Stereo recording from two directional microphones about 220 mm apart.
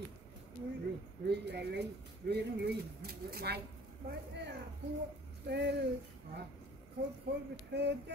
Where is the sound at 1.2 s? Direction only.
50° right (ahead or behind).